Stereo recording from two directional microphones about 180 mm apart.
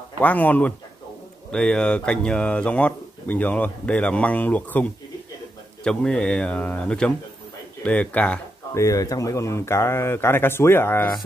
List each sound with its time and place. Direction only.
0.2 s speech: 10° left (ahead or behind)
5.9 s speech: 5° left (ahead or behind)
8.8 s speech: 20° left (ahead or behind)